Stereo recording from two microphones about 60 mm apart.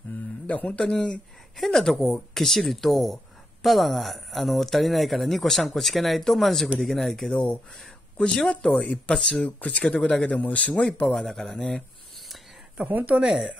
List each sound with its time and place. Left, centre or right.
0.5 s a man's voice: left
11.1 s speech: centre
12.8 s a woman's voice: right
13.2 s speech: centre